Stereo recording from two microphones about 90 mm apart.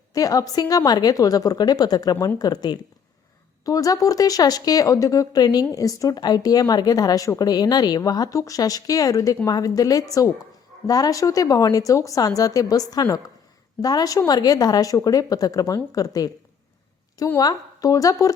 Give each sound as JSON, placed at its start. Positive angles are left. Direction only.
{"t": 0.1, "sound": "a woman's voice", "side_deg": 40}
{"t": 17.4, "sound": "a woman's voice", "side_deg": 45}